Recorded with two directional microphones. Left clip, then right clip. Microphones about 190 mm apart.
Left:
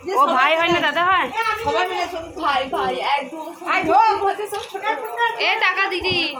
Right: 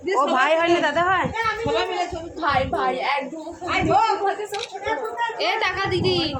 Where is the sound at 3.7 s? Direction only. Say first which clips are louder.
Left 4 dB; 50° right (ahead or behind).